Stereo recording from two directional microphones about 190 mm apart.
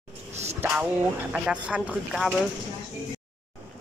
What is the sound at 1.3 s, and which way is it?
Speech, 5° right (ahead or behind).